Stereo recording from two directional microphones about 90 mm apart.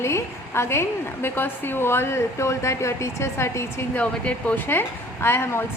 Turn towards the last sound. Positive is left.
turn(degrees=25)  # may be behind; listen again after turning